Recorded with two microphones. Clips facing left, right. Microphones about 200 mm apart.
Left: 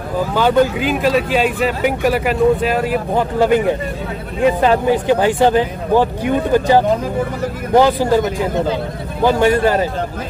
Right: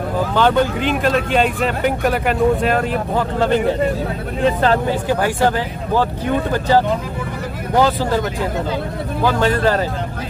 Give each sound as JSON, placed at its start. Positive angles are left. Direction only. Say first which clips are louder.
{"t": 0.3, "sound": "speech", "louder": "left 3 dB", "side_deg": 10}
{"t": 9.2, "sound": "speech", "louder": "left 4 dB", "side_deg": 15}